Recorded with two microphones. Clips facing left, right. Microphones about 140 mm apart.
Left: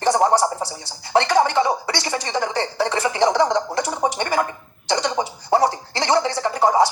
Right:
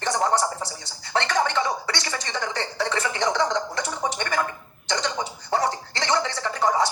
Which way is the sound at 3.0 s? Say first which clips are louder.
Left 7 dB; 35° left (ahead or behind).